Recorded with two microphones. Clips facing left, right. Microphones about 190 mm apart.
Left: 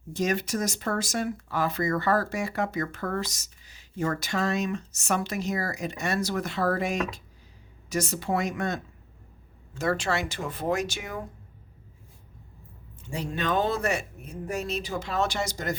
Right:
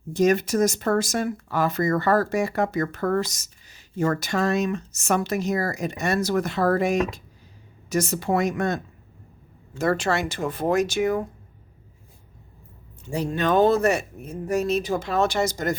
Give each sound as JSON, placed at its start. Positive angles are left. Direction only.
{"t": 0.2, "sound": "speech", "side_deg": -45}
{"t": 13.1, "sound": "speech", "side_deg": -40}